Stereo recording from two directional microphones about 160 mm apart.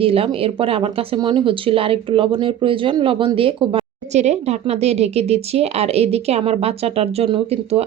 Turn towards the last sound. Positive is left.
turn(degrees=-40)  # may be behind; listen again after turning